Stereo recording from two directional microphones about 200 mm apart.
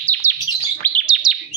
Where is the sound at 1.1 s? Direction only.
5° right (ahead or behind).